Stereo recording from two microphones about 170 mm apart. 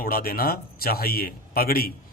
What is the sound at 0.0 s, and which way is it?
A man's voice, 60° left (ahead or behind).